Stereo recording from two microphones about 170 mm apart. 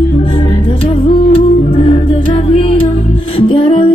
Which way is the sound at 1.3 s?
35° left (ahead or behind).